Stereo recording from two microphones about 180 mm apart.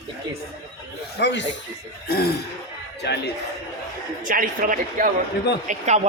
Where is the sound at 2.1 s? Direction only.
60° left (ahead or behind).